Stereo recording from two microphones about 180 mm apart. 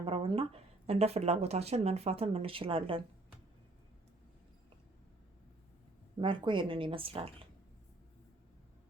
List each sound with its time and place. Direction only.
0.0 s speech: 30° right (ahead or behind)
6.1 s speech: 25° right (ahead or behind)